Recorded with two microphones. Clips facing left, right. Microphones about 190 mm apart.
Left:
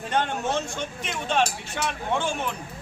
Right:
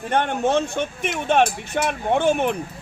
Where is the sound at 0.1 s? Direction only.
55° right (ahead or behind).